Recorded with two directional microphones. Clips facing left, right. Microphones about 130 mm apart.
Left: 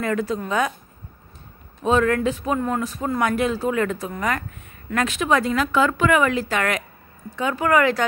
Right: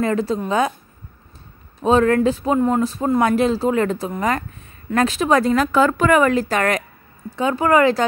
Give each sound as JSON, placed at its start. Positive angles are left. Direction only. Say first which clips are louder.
{"t": 0.0, "sound": "a woman's voice", "louder": "right 4 dB", "side_deg": -30}
{"t": 1.8, "sound": "speech", "louder": "right 4 dB", "side_deg": -35}